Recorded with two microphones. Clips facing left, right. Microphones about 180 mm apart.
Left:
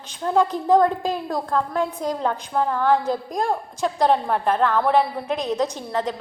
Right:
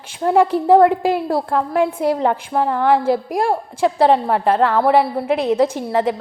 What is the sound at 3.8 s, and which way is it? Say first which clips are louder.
A woman's voice: right 5 dB; 75° right (ahead or behind).